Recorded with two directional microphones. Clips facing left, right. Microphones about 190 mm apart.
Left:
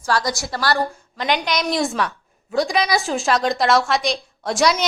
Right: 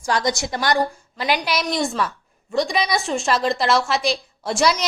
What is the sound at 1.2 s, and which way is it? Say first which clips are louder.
A woman's voice: left 1 dB; 5° right (ahead or behind).